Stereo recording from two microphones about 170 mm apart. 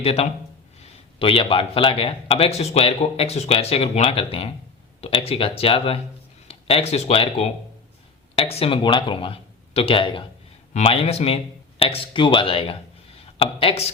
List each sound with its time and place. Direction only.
0.0 s speech: 35° left (ahead or behind)